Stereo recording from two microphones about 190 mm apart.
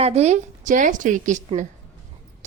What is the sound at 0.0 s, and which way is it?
A woman's voice, 35° right (ahead or behind).